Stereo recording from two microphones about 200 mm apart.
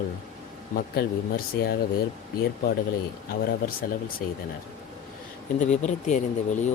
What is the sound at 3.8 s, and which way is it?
Speech, 45° left (ahead or behind).